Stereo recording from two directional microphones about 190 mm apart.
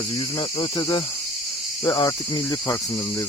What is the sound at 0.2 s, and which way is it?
Cricket, 25° left (ahead or behind).